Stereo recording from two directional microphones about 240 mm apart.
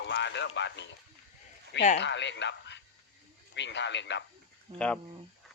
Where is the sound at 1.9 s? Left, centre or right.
Left.